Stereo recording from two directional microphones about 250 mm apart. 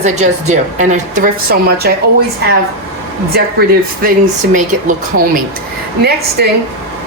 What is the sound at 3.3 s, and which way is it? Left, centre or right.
Speech, right.